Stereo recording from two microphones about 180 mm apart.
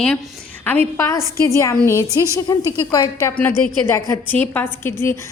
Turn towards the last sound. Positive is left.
turn(degrees=10)  # may be behind; listen again after turning